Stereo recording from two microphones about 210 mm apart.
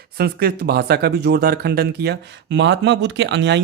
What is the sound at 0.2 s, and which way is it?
Speech, 50° right (ahead or behind).